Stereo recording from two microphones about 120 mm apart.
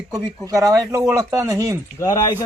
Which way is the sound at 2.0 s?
30° left (ahead or behind).